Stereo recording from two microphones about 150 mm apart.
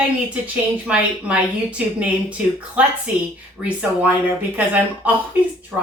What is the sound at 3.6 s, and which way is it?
A woman's voice, 10° right (ahead or behind).